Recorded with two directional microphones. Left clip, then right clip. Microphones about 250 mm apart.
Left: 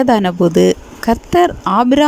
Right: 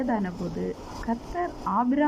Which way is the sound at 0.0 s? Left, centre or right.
Left.